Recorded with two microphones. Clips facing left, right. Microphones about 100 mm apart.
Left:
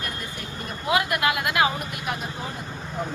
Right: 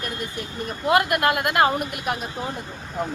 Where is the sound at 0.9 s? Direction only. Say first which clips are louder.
Right 3 dB; 50° right (ahead or behind).